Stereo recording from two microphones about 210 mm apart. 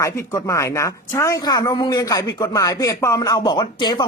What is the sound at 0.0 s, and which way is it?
A woman's voice, 15° left (ahead or behind).